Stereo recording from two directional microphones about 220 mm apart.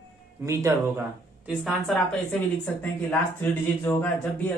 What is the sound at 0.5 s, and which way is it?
Speech, 10° right (ahead or behind).